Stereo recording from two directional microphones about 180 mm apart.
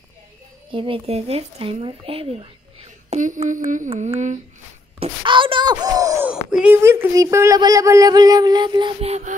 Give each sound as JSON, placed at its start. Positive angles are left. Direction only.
{"t": 0.7, "sound": "speech", "side_deg": -30}
{"t": 3.2, "sound": "mantra", "side_deg": -45}
{"t": 5.0, "sound": "wail", "side_deg": -25}
{"t": 6.5, "sound": "speech", "side_deg": -10}